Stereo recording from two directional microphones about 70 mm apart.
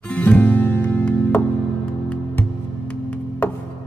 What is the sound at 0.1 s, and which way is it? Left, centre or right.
Music, left.